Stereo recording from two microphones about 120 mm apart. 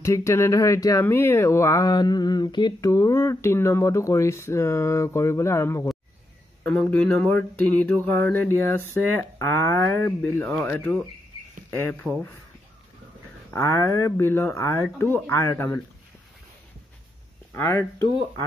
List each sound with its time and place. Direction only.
0.0 s speech: 25° left (ahead or behind)
2.9 s speech: 25° left (ahead or behind)
6.6 s speech: 10° left (ahead or behind)
13.5 s speech: 20° left (ahead or behind)
17.6 s speech: 25° left (ahead or behind)